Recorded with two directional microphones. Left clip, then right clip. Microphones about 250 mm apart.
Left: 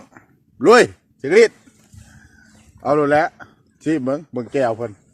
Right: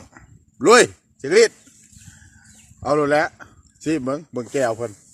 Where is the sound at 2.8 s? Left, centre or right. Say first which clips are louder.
Left 2 dB; centre.